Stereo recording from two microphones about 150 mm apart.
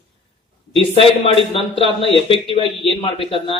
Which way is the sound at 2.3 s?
40° left (ahead or behind).